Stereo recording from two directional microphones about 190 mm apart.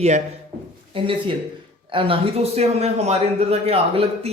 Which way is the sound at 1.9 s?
30° right (ahead or behind).